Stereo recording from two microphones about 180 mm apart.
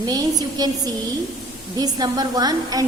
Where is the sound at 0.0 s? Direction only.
20° right (ahead or behind).